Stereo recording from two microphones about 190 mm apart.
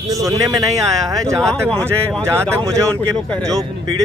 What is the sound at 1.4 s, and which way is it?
Speech, 5° left (ahead or behind).